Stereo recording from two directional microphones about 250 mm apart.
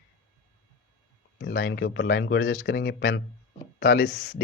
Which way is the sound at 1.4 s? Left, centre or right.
Left.